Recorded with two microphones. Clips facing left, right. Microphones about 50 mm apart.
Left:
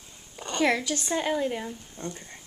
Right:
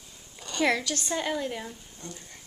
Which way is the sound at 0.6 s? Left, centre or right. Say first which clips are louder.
Left 1 dB; centre.